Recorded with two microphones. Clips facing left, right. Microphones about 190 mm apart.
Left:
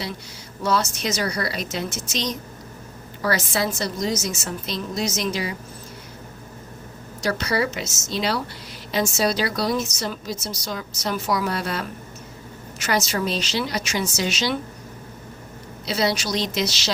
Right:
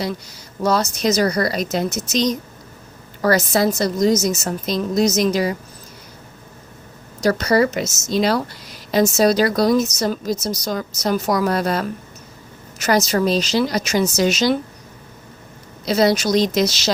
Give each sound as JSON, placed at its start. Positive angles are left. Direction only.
{"t": 0.6, "sound": "a woman's voice", "side_deg": -40}
{"t": 7.2, "sound": "a woman's voice", "side_deg": -40}
{"t": 15.9, "sound": "a woman's voice", "side_deg": -45}